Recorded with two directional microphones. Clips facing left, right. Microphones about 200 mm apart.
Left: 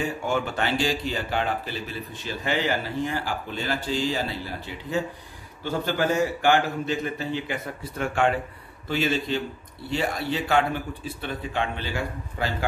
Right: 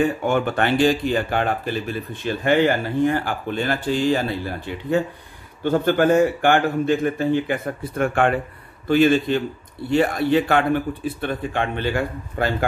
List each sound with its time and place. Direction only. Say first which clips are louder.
0.0 s a man's voice: right 7 dB; 55° right (ahead or behind)